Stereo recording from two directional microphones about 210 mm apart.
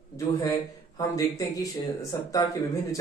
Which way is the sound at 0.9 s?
15° left (ahead or behind).